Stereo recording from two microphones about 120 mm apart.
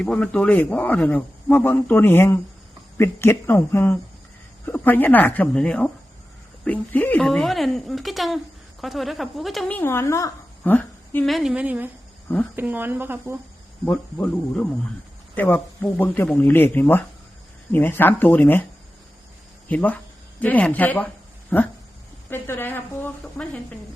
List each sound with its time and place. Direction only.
0.0 s speech: 10° left (ahead or behind)
7.3 s a woman's voice: centre (ahead or behind)
9.6 s speech: 15° left (ahead or behind)
10.6 s a sound: 15° left (ahead or behind)
11.3 s a woman's voice: centre (ahead or behind)
11.5 s speech: 10° right (ahead or behind)
13.8 s speech: 10° left (ahead or behind)
19.6 s speech: 15° left (ahead or behind)